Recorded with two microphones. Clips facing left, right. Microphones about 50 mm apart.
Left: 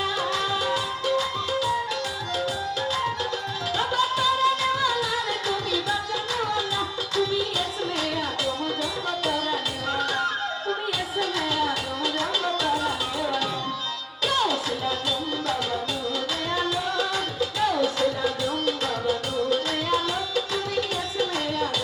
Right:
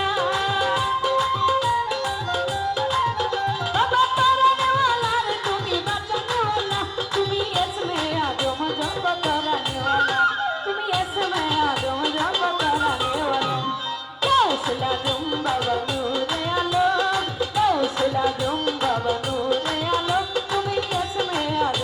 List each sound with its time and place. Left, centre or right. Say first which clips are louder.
0.0 s music: right 4 dB; centre
3.8 s music: right 6 dB; centre
9.0 s music: right 5 dB; centre
16.6 s music: right 7 dB; centre